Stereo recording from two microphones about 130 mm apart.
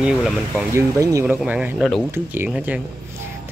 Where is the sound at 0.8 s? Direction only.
25° right (ahead or behind).